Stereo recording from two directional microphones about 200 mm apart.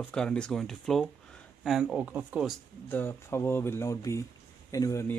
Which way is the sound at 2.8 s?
10° left (ahead or behind).